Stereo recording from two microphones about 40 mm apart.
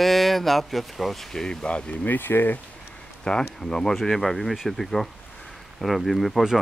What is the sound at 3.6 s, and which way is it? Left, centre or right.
Speech, centre.